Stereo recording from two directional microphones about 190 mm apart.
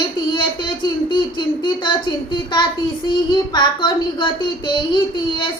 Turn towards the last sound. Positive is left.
turn(degrees=25)  # may be behind; listen again after turning